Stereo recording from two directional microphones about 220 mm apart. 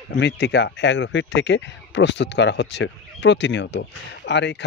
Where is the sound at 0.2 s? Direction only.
50° left (ahead or behind).